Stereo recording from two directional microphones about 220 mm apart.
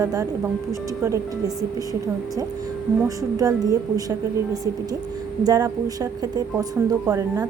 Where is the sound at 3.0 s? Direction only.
15° right (ahead or behind).